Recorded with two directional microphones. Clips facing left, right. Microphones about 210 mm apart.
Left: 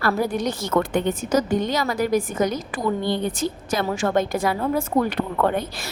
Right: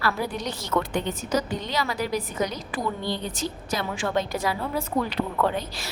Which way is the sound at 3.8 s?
40° left (ahead or behind).